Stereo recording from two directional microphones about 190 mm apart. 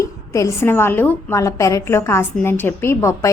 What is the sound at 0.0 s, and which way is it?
A woman's voice, 15° left (ahead or behind).